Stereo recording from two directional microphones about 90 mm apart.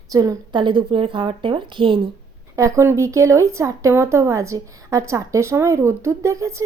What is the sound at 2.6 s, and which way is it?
Speech, 35° right (ahead or behind).